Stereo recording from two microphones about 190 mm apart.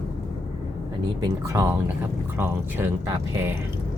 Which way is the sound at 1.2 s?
15° right (ahead or behind).